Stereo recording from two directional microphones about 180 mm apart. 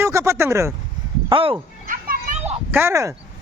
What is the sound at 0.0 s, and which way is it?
Speech, 15° right (ahead or behind).